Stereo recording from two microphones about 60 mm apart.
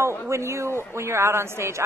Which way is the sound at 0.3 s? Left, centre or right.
Right.